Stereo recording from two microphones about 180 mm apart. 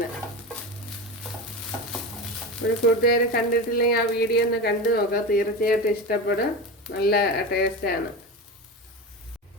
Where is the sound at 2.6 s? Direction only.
90° left.